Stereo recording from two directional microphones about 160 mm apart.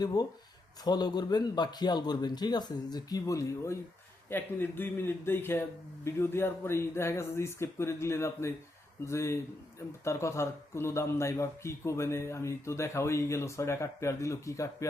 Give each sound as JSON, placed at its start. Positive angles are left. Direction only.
{"t": 0.0, "sound": "speech", "side_deg": 25}